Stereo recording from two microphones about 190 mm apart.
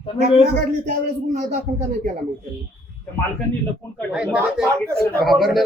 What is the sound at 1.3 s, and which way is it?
Speech, 40° right (ahead or behind).